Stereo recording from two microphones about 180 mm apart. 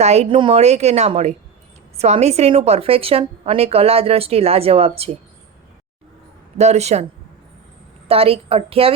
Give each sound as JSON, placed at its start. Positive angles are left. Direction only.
{"t": 0.0, "sound": "a woman's voice", "side_deg": -35}
{"t": 6.6, "sound": "a woman's voice", "side_deg": -35}
{"t": 8.0, "sound": "a woman's voice", "side_deg": -30}